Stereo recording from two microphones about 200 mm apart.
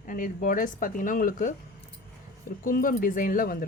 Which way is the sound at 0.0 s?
40° left (ahead or behind).